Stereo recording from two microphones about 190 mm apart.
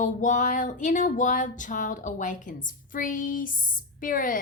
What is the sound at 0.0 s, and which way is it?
A woman's voice, 40° left (ahead or behind).